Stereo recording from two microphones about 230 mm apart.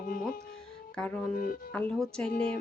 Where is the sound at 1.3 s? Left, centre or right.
Left.